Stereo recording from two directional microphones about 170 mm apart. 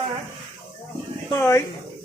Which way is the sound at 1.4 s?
15° left (ahead or behind).